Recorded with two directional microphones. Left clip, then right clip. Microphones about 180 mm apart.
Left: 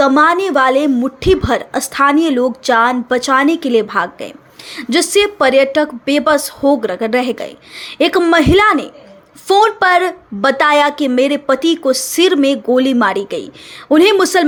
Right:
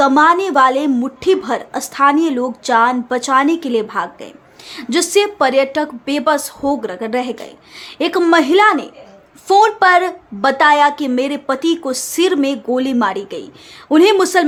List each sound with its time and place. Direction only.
0.0 s a woman's voice: 10° left (ahead or behind)